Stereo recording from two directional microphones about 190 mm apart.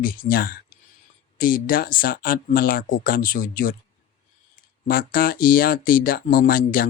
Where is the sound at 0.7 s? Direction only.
50° left (ahead or behind).